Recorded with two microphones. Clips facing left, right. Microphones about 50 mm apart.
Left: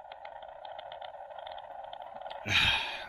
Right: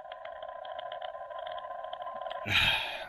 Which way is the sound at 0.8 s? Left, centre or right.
Right.